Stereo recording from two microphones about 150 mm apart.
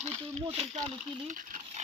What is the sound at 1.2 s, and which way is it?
Speech, 55° right (ahead or behind).